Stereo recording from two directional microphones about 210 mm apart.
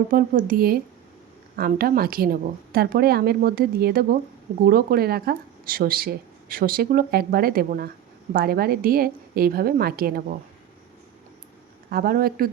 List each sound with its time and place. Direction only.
0.1 s speech: 40° right (ahead or behind)
11.9 s speech: 45° right (ahead or behind)